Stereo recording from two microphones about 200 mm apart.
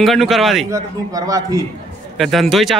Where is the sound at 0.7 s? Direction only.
15° right (ahead or behind).